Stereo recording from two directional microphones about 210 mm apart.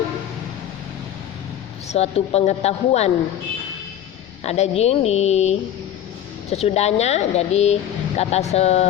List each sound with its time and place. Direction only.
1.9 s speech: 30° left (ahead or behind)
4.4 s speech: 30° left (ahead or behind)